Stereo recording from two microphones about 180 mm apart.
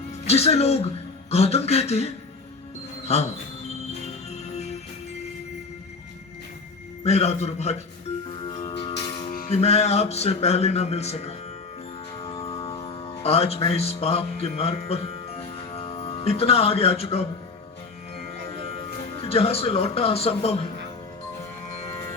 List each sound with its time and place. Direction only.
0.3 s a man's voice: 35° left (ahead or behind)
4.0 s music: 35° left (ahead or behind)
7.0 s a man's voice: 35° left (ahead or behind)
8.3 s music: 30° left (ahead or behind)
9.5 s a man's voice: 35° left (ahead or behind)
12.2 s music: 30° left (ahead or behind)
12.8 s speech: 30° left (ahead or behind)
19.2 s a man's voice: 35° left (ahead or behind)